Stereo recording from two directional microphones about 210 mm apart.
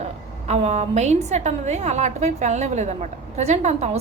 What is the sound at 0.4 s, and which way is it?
A woman's voice, 30° right (ahead or behind).